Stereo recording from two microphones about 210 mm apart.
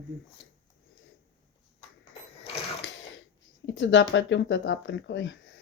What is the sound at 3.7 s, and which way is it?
Speech, 65° left (ahead or behind).